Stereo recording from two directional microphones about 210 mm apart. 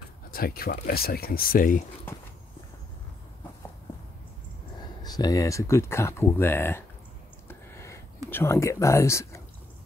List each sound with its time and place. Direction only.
0.3 s speech: 45° left (ahead or behind)
5.0 s speech: 15° left (ahead or behind)
7.4 s a sound: 15° left (ahead or behind)
8.3 s speech: 10° left (ahead or behind)